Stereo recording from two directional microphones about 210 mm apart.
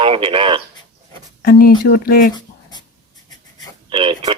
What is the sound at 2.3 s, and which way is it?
Writing, 20° left (ahead or behind).